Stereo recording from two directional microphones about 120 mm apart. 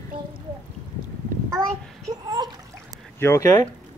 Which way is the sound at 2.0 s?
35° right (ahead or behind).